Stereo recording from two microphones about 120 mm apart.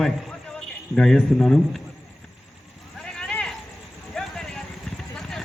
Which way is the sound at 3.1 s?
5° left (ahead or behind).